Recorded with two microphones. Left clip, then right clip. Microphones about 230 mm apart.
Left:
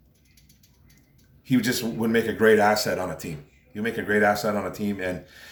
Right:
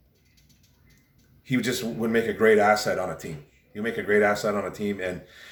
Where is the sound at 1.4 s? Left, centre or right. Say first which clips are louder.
Left 2 dB; centre.